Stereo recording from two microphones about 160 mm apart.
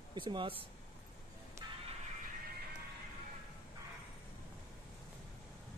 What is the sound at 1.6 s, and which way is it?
Music, 20° right (ahead or behind).